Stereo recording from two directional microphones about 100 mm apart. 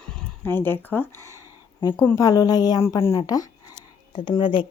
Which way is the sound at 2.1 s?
35° left (ahead or behind).